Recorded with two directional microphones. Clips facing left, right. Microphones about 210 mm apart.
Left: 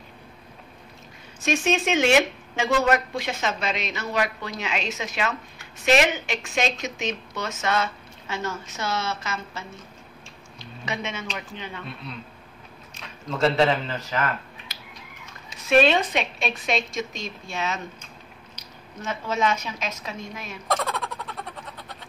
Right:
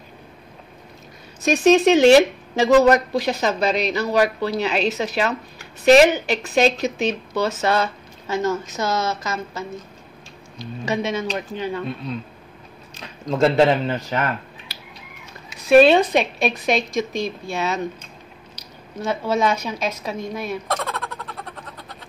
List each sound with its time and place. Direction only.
1.4 s speech: 35° right (ahead or behind)
11.1 s speech: 40° right (ahead or behind)
12.9 s speech: 35° right (ahead or behind)
15.6 s speech: 35° right (ahead or behind)
18.9 s speech: 35° right (ahead or behind)
20.6 s a sound: centre (ahead or behind)